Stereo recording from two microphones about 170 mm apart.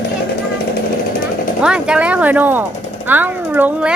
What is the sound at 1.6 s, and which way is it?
Speech, 5° right (ahead or behind).